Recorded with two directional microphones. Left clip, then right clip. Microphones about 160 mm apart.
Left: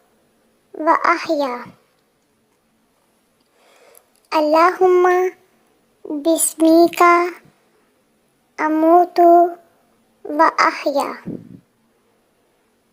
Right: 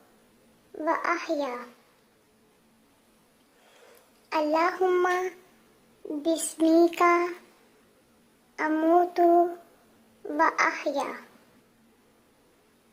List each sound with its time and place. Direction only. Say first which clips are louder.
0.8 s child singing: left 12 dB; 35° left (ahead or behind)
4.3 s child singing: left 11 dB; 30° left (ahead or behind)
8.5 s child singing: left 10 dB; 25° left (ahead or behind)